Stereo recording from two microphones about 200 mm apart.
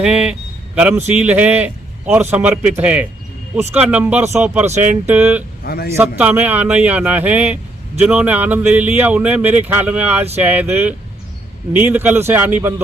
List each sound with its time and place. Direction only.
0.0 s a man's voice: 5° right (ahead or behind)
5.6 s a man's voice: 50° left (ahead or behind)
6.0 s a man's voice: 10° right (ahead or behind)